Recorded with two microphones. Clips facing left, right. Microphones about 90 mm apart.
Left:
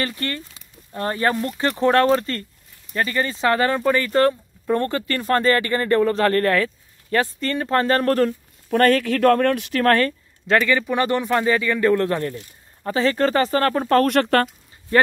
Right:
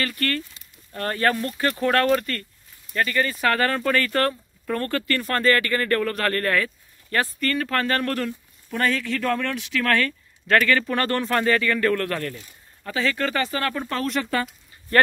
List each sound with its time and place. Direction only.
0.0 s speech: 25° left (ahead or behind)
8.6 s speech: 55° left (ahead or behind); by 10.1 s 35° left (ahead or behind)
10.4 s speech: 20° left (ahead or behind)
12.8 s speech: 35° left (ahead or behind); by 14.5 s 65° left (ahead or behind)